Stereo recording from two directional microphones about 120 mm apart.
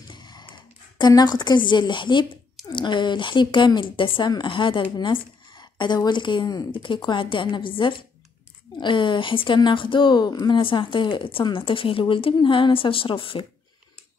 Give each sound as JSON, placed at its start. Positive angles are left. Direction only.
{"t": 0.1, "sound": "a sound", "side_deg": 40}
{"t": 2.7, "sound": "speech", "side_deg": 40}
{"t": 10.6, "sound": "a woman's voice", "side_deg": 45}